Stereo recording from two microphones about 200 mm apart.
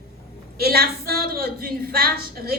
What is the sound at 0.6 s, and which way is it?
A woman's voice, 50° right (ahead or behind).